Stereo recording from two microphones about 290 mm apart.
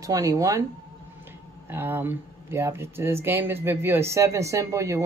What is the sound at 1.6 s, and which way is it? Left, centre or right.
Speech, centre.